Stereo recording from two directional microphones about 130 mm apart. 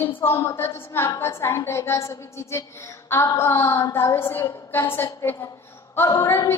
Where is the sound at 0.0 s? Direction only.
15° left (ahead or behind).